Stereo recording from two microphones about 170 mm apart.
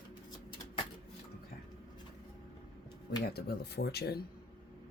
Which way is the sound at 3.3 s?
70° left (ahead or behind).